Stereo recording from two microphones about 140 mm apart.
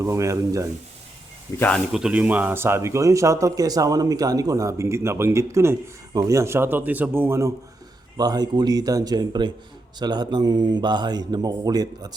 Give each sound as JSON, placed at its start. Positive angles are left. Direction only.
{"t": 0.0, "sound": "speech", "side_deg": -20}
{"t": 1.5, "sound": "speech", "side_deg": 15}
{"t": 1.9, "sound": "speech", "side_deg": -5}